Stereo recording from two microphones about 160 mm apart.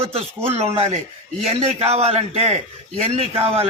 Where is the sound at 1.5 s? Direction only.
40° right (ahead or behind).